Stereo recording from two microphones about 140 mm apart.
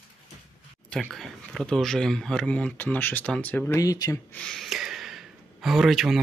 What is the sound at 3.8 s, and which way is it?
Speech, 25° left (ahead or behind).